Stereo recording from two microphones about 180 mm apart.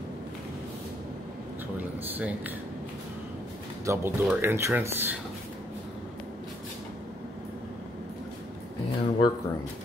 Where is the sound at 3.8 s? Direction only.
15° right (ahead or behind).